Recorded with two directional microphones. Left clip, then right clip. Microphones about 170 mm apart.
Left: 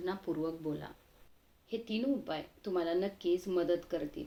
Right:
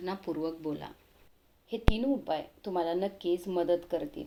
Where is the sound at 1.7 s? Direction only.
15° right (ahead or behind).